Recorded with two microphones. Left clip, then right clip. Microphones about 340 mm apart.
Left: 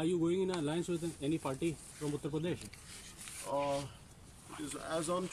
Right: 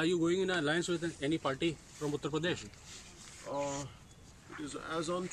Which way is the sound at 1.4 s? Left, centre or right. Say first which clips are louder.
Right 3 dB; right.